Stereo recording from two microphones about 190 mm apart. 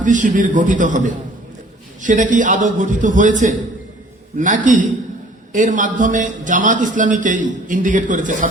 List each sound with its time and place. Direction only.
0.0 s a man's voice: 40° right (ahead or behind)